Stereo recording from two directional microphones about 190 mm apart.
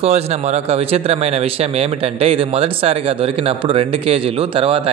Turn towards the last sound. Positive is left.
turn(degrees=-30)  # may be behind; listen again after turning